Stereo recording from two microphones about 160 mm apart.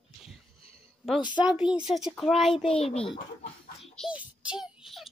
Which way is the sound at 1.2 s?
30° left (ahead or behind).